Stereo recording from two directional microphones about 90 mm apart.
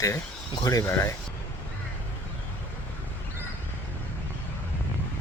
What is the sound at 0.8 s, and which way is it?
Speech, 30° left (ahead or behind).